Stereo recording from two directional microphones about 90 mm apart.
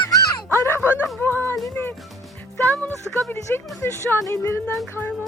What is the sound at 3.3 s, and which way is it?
Speech, 25° left (ahead or behind).